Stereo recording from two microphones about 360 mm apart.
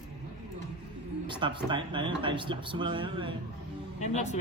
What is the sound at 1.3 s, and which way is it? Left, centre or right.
Speech, centre.